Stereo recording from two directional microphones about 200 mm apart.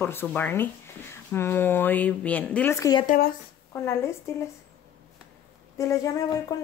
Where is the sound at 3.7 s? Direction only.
15° left (ahead or behind).